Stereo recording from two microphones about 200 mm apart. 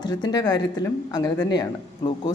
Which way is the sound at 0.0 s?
20° left (ahead or behind).